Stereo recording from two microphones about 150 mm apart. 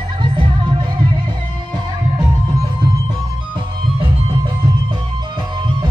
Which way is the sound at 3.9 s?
30° right (ahead or behind).